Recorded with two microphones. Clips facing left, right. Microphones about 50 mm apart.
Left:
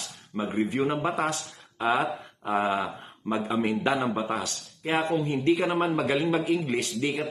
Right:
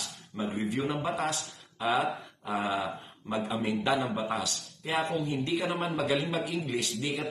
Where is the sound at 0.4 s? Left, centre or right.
Left.